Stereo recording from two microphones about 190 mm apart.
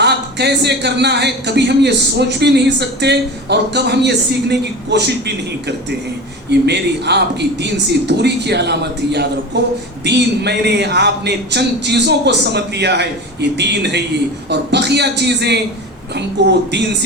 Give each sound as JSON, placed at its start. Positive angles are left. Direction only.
{"t": 0.0, "sound": "a man's voice", "side_deg": -60}